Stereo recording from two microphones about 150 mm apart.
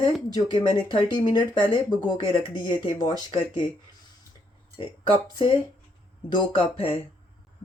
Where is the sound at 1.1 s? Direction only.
30° left (ahead or behind).